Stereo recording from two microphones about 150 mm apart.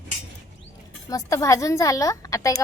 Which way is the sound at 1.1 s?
20° left (ahead or behind).